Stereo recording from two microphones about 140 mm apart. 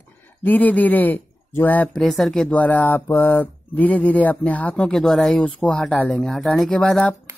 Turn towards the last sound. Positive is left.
turn(degrees=5)  # may be behind; listen again after turning